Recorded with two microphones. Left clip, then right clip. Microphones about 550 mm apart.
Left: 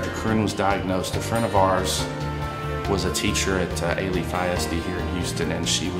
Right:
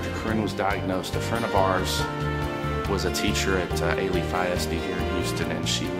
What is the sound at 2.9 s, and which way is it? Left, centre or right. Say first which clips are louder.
Speech: left 2 dB; right.